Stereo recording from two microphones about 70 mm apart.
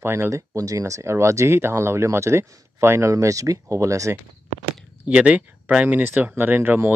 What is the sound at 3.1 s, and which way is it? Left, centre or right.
Speech, right.